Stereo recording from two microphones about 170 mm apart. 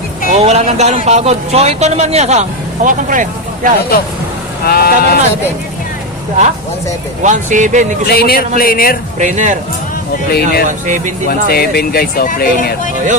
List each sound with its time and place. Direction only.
0.3 s speech: 40° right (ahead or behind)
4.6 s speech: 65° left (ahead or behind)
7.2 s speech: 45° right (ahead or behind)
8.0 s speech: 65° left (ahead or behind)
9.1 s speech: 45° right (ahead or behind)
10.3 s speech: 65° left (ahead or behind)
10.7 s speech: 50° right (ahead or behind)
11.4 s speech: 65° left (ahead or behind)